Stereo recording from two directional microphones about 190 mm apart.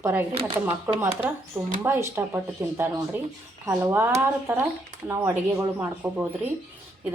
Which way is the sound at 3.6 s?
10° right (ahead or behind).